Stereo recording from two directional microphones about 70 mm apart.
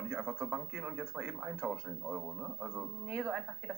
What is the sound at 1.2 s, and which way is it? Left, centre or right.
Speech, centre.